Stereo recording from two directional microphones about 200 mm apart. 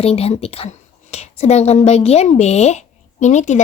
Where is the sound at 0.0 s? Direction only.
30° left (ahead or behind).